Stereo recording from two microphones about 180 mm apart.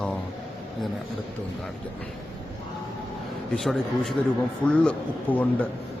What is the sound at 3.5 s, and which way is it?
A man's voice, centre (ahead or behind).